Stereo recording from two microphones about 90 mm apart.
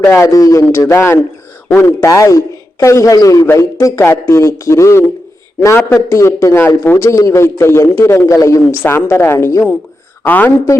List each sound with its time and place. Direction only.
0.1 s a man's voice: 35° left (ahead or behind)
0.8 s a man's voice: 30° left (ahead or behind)
8.8 s a man's voice: 25° left (ahead or behind)
10.2 s a man's voice: 20° left (ahead or behind)